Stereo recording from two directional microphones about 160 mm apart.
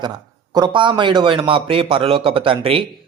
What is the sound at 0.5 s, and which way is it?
Speech, 30° right (ahead or behind).